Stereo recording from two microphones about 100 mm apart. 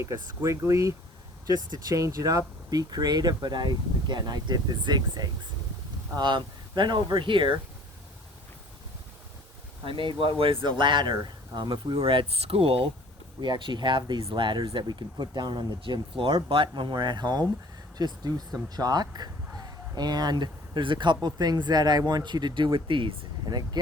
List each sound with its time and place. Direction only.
0.4 s speech: 30° right (ahead or behind); by 7.5 s 55° right (ahead or behind)
9.8 s speech: 60° right (ahead or behind)
11.9 s speech: 70° right (ahead or behind)
13.4 s speech: 50° right (ahead or behind)